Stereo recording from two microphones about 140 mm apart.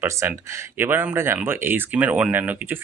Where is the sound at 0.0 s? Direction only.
15° right (ahead or behind).